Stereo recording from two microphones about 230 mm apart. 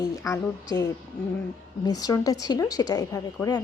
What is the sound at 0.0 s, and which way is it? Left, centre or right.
A woman's voice, centre.